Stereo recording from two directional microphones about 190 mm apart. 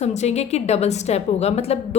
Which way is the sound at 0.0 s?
35° left (ahead or behind).